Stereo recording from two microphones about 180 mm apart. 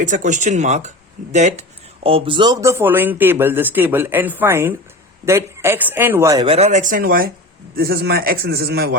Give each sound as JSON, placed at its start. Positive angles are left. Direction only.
{"t": 0.0, "sound": "speech", "side_deg": -45}
{"t": 2.0, "sound": "speech", "side_deg": -30}
{"t": 6.4, "sound": "speech", "side_deg": -35}